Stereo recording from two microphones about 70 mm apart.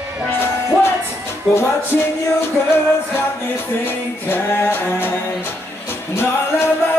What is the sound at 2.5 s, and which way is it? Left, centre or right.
Music, left.